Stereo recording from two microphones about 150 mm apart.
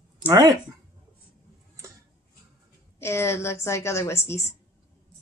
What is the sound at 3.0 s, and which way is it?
A woman's voice, 15° left (ahead or behind).